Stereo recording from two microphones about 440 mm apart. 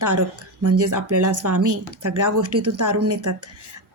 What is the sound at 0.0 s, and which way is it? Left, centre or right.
A woman's voice, right.